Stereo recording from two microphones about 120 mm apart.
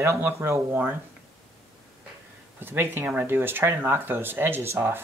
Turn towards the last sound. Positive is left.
turn(degrees=-20)  # may be behind; listen again after turning